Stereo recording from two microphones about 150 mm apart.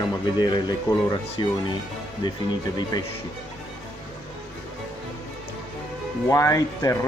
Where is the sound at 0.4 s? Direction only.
30° left (ahead or behind).